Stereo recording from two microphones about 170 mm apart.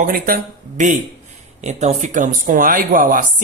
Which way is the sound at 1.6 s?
40° right (ahead or behind).